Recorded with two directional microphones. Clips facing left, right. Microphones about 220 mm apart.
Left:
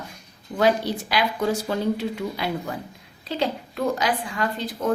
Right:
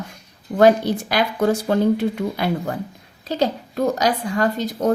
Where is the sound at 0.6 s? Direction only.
45° right (ahead or behind).